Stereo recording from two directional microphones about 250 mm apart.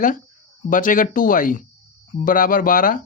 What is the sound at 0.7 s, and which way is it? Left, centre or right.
Speech, left.